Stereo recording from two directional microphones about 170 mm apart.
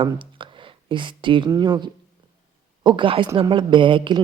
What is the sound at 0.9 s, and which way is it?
Speech, 30° right (ahead or behind).